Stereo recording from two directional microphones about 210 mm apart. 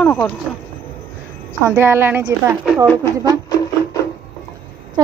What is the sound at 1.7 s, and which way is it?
A woman's voice, 10° right (ahead or behind).